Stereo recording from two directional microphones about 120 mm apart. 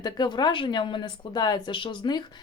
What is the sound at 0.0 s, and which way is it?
Speech, 35° left (ahead or behind).